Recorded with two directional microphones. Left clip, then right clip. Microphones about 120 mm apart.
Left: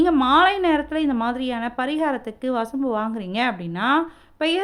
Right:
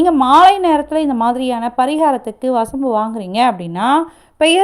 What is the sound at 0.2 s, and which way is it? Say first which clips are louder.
A woman's voice: right 8 dB; 30° right (ahead or behind).